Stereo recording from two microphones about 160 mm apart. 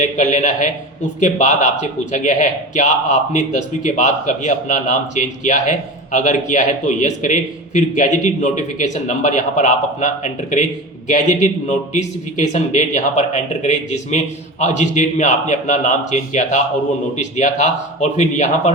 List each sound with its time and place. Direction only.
0.0 s a man's voice: 45° left (ahead or behind)
11.1 s a man's voice: 50° left (ahead or behind)